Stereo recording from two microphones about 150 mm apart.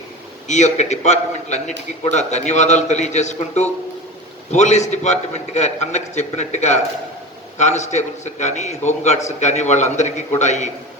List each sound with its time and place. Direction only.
0.4 s a man's voice: 50° left (ahead or behind)